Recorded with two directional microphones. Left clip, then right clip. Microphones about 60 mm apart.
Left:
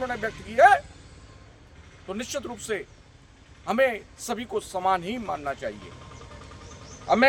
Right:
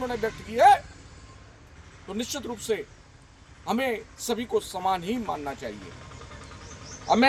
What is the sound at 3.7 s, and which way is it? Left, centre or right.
Speech, left.